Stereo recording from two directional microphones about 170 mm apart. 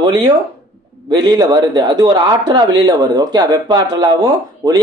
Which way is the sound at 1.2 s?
25° right (ahead or behind).